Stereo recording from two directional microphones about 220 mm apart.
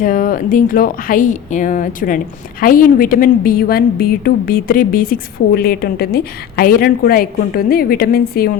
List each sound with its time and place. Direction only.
0.0 s speech: 40° left (ahead or behind)